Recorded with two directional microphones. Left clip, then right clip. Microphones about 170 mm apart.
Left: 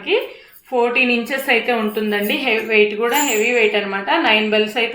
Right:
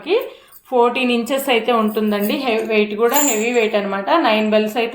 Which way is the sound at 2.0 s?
40° right (ahead or behind).